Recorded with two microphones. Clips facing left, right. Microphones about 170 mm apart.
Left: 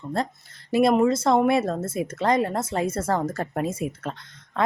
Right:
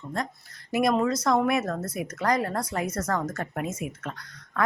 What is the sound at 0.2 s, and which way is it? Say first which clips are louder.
Speech: left 4 dB; 30° left (ahead or behind).